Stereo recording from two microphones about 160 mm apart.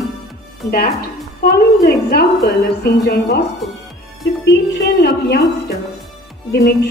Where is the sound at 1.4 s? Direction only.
90° left.